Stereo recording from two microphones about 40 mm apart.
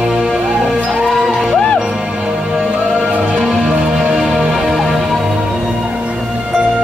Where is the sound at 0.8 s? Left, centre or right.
Centre.